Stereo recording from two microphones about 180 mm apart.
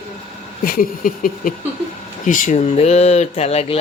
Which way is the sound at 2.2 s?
45° left (ahead or behind).